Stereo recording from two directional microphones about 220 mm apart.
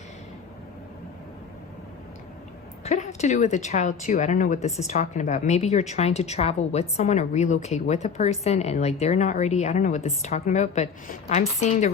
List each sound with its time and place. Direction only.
2.8 s speech: 30° left (ahead or behind)